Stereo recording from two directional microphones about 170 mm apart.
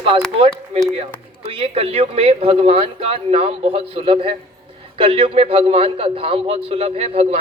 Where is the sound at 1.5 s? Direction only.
35° right (ahead or behind).